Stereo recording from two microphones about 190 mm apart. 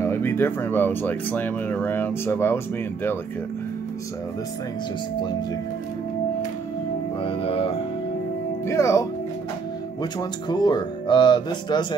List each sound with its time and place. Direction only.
0.0 s speech: 15° left (ahead or behind)
7.2 s speech: 30° left (ahead or behind)
8.6 s speech: 15° left (ahead or behind)
10.5 s speech: 25° left (ahead or behind)